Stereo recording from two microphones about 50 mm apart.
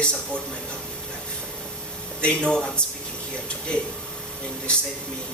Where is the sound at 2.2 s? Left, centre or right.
Centre.